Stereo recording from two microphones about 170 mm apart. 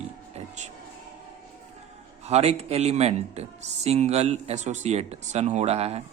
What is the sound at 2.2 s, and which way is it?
Speech, 40° right (ahead or behind).